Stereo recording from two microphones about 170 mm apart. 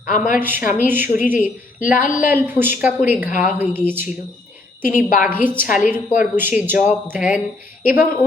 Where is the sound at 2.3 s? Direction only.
10° right (ahead or behind).